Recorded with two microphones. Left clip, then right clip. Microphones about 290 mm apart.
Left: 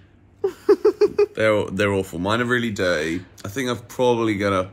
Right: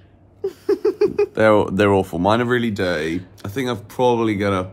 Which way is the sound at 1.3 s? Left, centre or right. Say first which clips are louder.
Right 5 dB; right.